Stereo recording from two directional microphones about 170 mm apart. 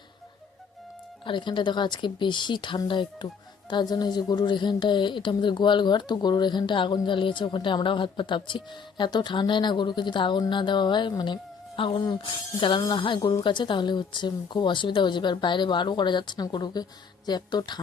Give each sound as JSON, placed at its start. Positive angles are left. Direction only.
{"t": 1.2, "sound": "speech", "side_deg": 30}